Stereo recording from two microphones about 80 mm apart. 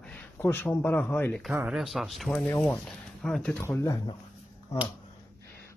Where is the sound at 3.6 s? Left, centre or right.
Left.